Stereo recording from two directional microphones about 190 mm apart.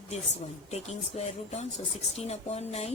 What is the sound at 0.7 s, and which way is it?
A woman's voice, 35° left (ahead or behind).